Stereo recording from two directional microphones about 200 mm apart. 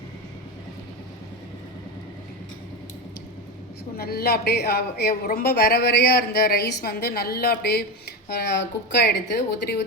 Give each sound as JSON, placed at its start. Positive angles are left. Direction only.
{"t": 3.9, "sound": "speech", "side_deg": 50}